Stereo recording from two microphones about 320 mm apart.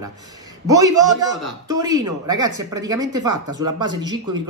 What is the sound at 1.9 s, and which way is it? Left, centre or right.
Speech, right.